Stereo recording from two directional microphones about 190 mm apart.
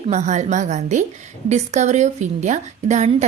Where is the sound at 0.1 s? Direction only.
40° right (ahead or behind).